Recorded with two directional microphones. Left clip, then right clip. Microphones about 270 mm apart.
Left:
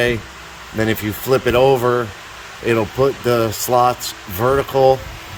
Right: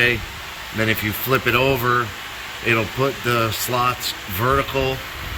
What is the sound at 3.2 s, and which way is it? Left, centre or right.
Speech, centre.